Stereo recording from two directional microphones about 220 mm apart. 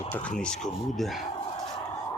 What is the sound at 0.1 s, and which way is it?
Speech, 5° left (ahead or behind).